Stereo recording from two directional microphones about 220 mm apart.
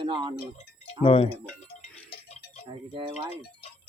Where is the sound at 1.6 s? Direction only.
25° left (ahead or behind).